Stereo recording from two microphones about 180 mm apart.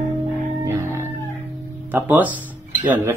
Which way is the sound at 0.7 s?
15° right (ahead or behind).